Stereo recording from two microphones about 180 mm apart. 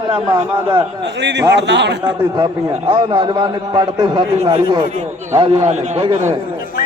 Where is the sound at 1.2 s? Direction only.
75° right (ahead or behind).